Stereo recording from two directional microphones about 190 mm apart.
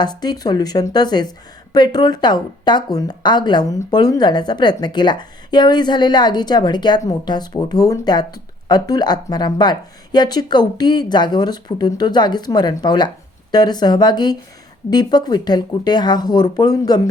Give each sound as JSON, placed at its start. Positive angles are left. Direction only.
{"t": 0.0, "sound": "a woman's voice", "side_deg": 20}